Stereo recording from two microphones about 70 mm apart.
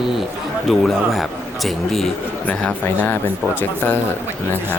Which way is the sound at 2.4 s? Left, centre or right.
Centre.